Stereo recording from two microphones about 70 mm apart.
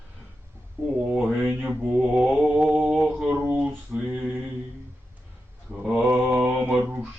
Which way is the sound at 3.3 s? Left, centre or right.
Right.